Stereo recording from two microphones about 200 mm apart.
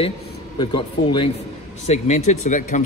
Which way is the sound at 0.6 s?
25° left (ahead or behind).